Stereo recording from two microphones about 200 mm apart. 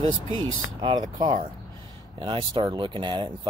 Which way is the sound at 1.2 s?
25° right (ahead or behind).